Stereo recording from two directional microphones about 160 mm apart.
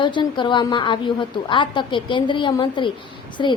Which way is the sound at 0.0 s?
30° left (ahead or behind).